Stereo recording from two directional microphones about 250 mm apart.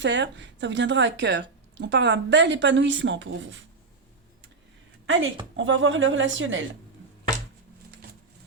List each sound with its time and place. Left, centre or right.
0.0 s a woman's voice: right
5.0 s a woman's voice: right